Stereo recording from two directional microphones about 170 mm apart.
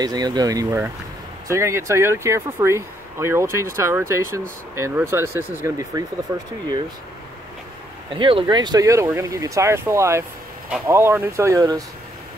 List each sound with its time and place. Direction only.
0.0 s speech: 25° right (ahead or behind)
8.2 s speech: 30° right (ahead or behind)